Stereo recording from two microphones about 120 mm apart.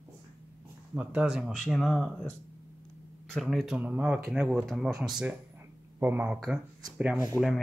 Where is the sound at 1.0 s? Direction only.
10° right (ahead or behind).